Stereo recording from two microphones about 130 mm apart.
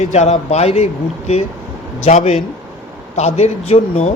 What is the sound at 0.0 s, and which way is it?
Speech, 60° left (ahead or behind).